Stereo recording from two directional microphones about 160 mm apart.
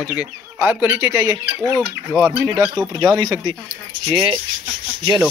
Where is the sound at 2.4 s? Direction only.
20° right (ahead or behind).